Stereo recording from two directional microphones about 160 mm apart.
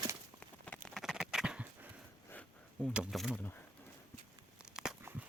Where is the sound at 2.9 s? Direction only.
5° right (ahead or behind).